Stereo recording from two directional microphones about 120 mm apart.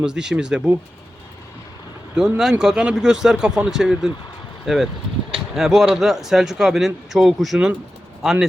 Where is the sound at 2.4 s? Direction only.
5° right (ahead or behind).